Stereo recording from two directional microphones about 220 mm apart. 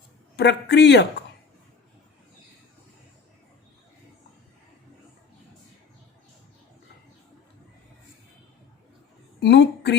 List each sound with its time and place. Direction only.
0.3 s speech: 50° left (ahead or behind)
9.4 s a woman's voice: 50° left (ahead or behind)